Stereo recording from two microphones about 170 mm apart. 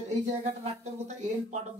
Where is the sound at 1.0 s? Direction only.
45° right (ahead or behind).